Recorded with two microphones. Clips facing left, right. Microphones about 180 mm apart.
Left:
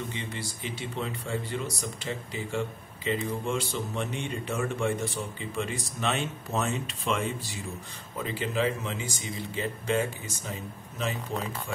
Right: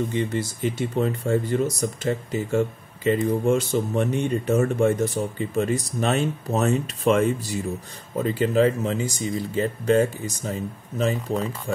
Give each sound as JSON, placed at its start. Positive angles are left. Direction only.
{"t": 0.1, "sound": "speech", "side_deg": -45}